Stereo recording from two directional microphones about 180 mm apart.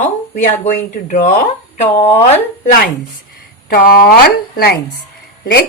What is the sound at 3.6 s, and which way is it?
Speech, 55° left (ahead or behind).